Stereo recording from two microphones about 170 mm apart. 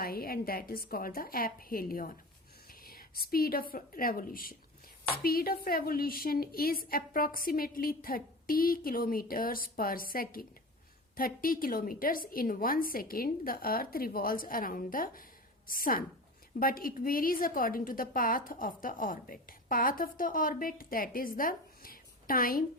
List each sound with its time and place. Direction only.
0.0 s a woman's voice: 65° left (ahead or behind)